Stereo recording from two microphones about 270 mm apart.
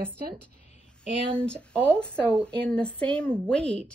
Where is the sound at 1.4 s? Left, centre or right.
Centre.